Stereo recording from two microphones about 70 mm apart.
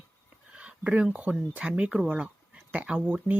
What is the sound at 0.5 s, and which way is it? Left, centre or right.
Speech, centre.